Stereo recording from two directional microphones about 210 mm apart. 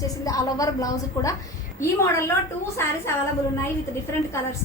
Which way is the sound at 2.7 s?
10° left (ahead or behind).